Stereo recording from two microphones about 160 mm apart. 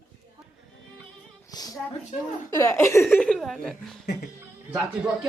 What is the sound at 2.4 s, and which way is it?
Speech, 15° left (ahead or behind).